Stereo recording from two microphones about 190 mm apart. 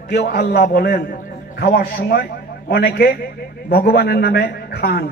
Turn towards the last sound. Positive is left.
turn(degrees=55)  # may be behind; listen again after turning